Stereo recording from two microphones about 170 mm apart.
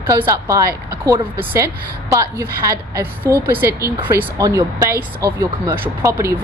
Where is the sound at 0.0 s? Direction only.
15° right (ahead or behind).